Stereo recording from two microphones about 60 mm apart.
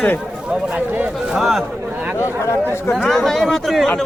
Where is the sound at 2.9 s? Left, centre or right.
Centre.